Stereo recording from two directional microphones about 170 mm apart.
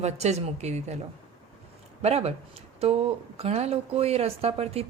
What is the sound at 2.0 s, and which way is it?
Speech, 40° right (ahead or behind).